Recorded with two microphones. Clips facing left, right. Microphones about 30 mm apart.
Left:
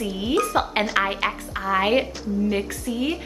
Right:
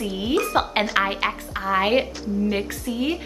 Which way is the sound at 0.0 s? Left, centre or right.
Centre.